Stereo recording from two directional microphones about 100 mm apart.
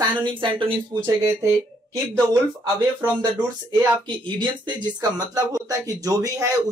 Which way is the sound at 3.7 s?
50° right (ahead or behind).